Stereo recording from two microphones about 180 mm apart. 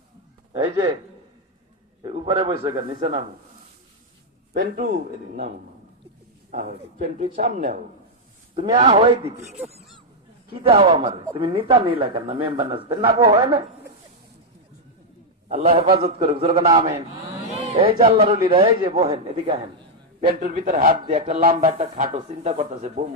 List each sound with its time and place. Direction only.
0.5 s speech: 25° right (ahead or behind)
2.0 s speech: 30° right (ahead or behind)
4.6 s a man's voice: 55° right (ahead or behind)
6.5 s a man's voice: 45° right (ahead or behind)
8.5 s speech: 25° right (ahead or behind)
10.5 s a man's voice: 30° right (ahead or behind)
15.4 s a man's voice: 35° right (ahead or behind)
20.7 s speech: 45° right (ahead or behind)
21.2 s a man's voice: 35° right (ahead or behind)